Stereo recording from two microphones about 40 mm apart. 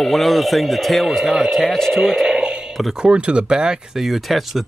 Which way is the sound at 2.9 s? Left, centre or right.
Right.